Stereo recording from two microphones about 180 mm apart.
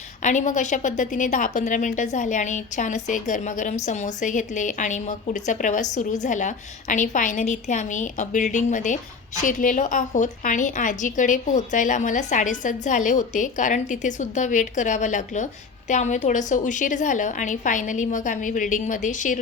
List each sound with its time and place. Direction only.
0.2 s a woman's voice: 45° left (ahead or behind)